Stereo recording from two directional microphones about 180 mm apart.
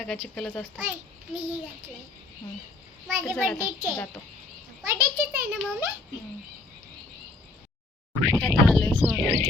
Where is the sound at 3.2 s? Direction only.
Centre (ahead or behind).